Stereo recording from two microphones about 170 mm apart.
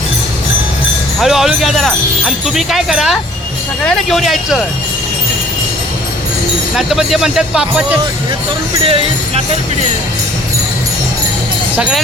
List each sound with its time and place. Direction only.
1.2 s speech: centre (ahead or behind)
6.7 s speech: centre (ahead or behind)
8.8 s speech: 35° right (ahead or behind)
11.8 s speech: 5° right (ahead or behind)